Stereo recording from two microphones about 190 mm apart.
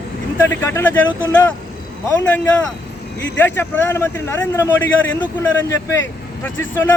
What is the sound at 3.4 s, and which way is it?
A man's voice, 10° left (ahead or behind).